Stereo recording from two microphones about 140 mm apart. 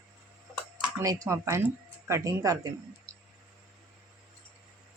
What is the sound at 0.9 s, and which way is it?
Speech, 25° right (ahead or behind).